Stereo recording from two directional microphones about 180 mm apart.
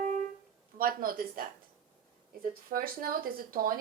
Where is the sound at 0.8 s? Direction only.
55° right (ahead or behind).